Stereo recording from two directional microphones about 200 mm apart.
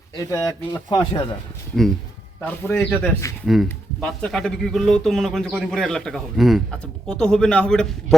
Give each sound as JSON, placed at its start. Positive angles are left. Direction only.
{"t": 0.2, "sound": "speech", "side_deg": 15}
{"t": 2.4, "sound": "speech", "side_deg": 10}
{"t": 3.4, "sound": "a man's voice", "side_deg": 0}